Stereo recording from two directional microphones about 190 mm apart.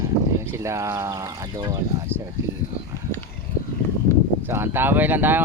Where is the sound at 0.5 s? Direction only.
15° right (ahead or behind).